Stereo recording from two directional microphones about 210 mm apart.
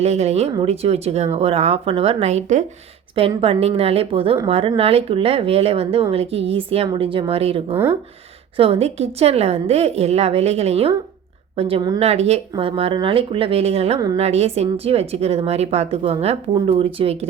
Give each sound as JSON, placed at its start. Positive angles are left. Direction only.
{"t": 0.0, "sound": "speech", "side_deg": -30}